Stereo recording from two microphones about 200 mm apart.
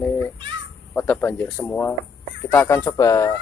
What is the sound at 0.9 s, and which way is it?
Speech, 10° left (ahead or behind).